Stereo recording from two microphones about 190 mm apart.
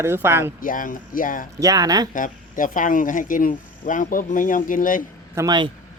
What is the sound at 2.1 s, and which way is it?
Speech, 45° left (ahead or behind).